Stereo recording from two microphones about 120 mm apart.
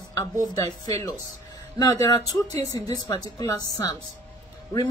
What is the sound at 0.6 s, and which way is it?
Speech, 30° left (ahead or behind).